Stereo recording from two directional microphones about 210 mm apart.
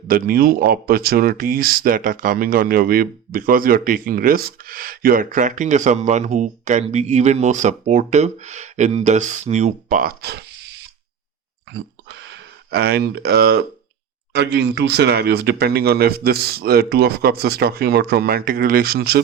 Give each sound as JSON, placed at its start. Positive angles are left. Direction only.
{"t": 0.1, "sound": "speech", "side_deg": -45}
{"t": 12.7, "sound": "speech", "side_deg": -50}